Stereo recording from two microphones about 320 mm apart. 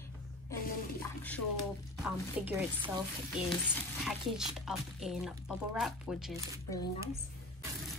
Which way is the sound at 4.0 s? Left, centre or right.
Centre.